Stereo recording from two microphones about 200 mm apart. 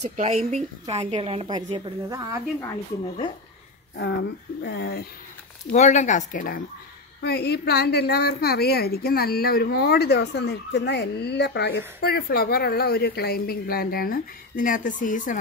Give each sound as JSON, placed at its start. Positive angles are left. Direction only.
{"t": 0.1, "sound": "a woman's voice", "side_deg": -35}
{"t": 2.0, "sound": "speech", "side_deg": -15}
{"t": 3.9, "sound": "speech", "side_deg": 55}
{"t": 5.7, "sound": "speech", "side_deg": 35}
{"t": 7.2, "sound": "a woman's voice", "side_deg": 55}